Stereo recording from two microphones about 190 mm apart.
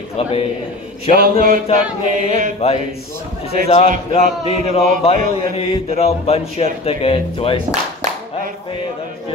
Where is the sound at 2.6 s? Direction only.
30° left (ahead or behind).